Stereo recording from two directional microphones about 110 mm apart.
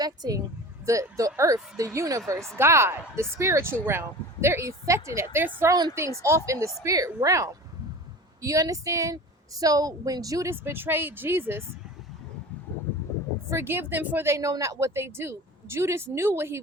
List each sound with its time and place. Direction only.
0.0 s a woman's voice: 35° right (ahead or behind)
13.5 s speech: 20° right (ahead or behind)